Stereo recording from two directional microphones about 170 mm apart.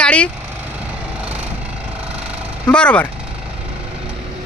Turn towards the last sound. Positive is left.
turn(degrees=5)  # may be behind; listen again after turning